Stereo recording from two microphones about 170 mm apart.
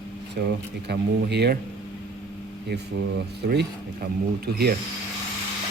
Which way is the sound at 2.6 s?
80° right.